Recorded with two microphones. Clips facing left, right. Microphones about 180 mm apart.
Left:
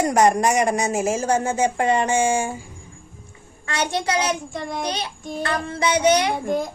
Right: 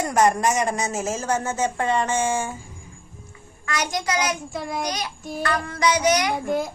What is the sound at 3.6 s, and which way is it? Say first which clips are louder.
Child singing: left 2 dB; 30° left (ahead or behind).